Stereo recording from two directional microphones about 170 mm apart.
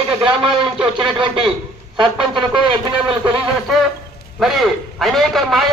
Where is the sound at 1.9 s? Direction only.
30° right (ahead or behind).